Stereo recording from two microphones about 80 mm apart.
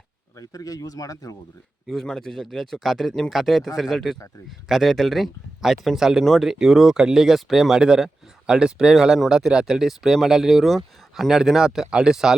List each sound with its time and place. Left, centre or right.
0.3 s speech: left
1.9 s speech: centre